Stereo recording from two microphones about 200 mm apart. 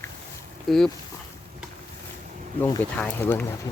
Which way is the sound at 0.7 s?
Centre (ahead or behind).